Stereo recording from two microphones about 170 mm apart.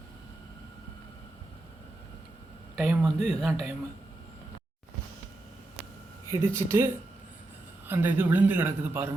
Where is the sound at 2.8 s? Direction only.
5° right (ahead or behind).